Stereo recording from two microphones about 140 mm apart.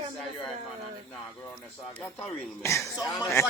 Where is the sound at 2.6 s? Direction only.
20° left (ahead or behind).